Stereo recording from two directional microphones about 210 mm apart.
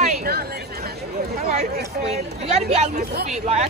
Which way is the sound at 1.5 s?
30° right (ahead or behind).